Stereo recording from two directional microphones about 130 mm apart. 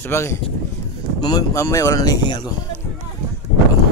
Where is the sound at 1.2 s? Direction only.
30° left (ahead or behind).